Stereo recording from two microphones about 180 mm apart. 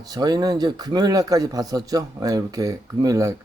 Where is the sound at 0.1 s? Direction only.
20° right (ahead or behind).